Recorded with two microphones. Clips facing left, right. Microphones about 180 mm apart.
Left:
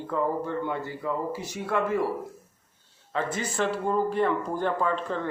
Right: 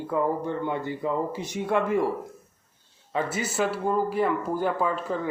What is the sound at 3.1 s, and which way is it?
Speech, 5° right (ahead or behind).